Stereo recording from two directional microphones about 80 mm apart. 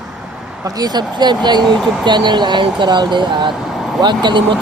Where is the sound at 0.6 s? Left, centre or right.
Right.